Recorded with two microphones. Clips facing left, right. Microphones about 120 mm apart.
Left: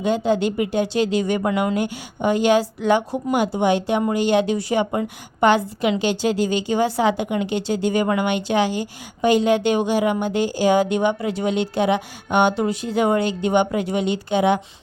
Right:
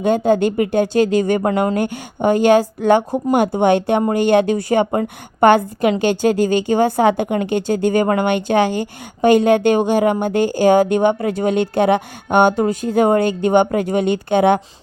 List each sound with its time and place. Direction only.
0.0 s a woman's voice: 50° right (ahead or behind)